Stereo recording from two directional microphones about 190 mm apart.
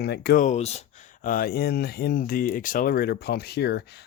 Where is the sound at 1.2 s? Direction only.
50° left (ahead or behind).